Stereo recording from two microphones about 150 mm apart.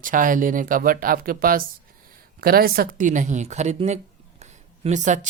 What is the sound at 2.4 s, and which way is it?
Speech, 90° right.